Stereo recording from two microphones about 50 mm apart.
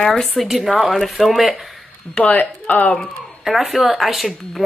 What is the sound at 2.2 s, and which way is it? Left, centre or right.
Speech, left.